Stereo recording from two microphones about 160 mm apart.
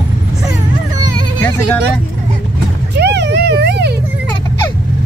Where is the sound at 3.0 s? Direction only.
90° right.